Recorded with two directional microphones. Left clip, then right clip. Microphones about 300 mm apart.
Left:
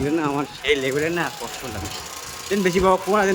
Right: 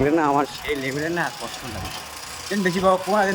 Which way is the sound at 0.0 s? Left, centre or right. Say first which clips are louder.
Right 4 dB; centre.